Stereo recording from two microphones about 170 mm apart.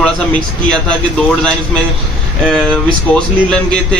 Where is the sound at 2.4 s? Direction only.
5° left (ahead or behind).